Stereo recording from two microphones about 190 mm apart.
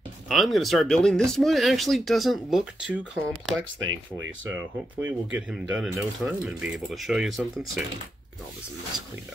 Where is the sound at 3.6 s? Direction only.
90° right.